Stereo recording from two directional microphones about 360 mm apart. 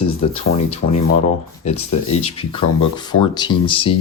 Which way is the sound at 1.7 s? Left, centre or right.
Centre.